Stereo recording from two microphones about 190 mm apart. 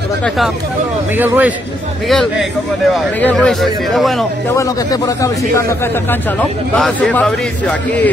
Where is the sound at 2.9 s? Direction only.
5° left (ahead or behind).